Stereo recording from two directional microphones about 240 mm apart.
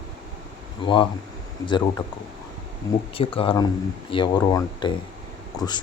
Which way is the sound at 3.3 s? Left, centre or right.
Centre.